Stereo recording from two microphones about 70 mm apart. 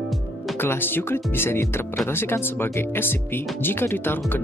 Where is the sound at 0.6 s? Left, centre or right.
Left.